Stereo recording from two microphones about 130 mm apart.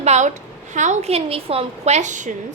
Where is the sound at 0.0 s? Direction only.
60° right (ahead or behind).